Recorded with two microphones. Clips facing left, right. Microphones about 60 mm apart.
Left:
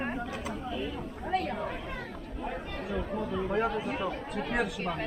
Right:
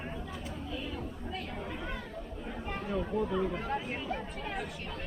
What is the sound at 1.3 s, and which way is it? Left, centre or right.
Speech, left.